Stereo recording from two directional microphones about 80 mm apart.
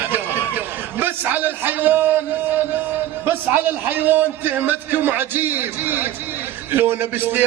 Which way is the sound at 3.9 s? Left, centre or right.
Right.